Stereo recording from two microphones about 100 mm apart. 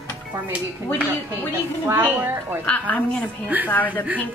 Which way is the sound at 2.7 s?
15° left (ahead or behind).